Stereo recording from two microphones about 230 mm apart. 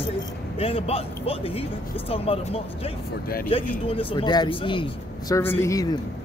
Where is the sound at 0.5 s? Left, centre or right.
Left.